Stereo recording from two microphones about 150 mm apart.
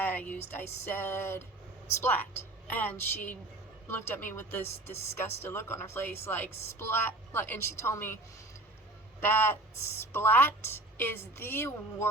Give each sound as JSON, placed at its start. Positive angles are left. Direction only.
{"t": 0.0, "sound": "a sound", "side_deg": 10}
{"t": 0.5, "sound": "a woman's voice", "side_deg": 15}
{"t": 9.2, "sound": "a woman's voice", "side_deg": 15}